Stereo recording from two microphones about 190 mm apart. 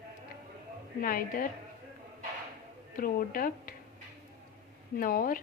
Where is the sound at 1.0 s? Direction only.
45° left (ahead or behind).